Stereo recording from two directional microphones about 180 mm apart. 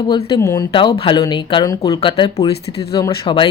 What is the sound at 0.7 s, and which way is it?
Speech, 30° left (ahead or behind).